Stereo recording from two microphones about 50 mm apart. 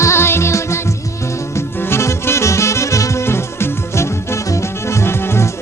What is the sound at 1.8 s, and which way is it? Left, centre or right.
Music, left.